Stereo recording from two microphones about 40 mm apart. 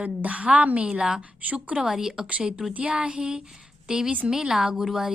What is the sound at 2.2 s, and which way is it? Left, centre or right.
A woman's voice, right.